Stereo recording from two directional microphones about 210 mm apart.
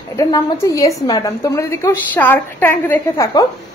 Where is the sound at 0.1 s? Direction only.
15° left (ahead or behind).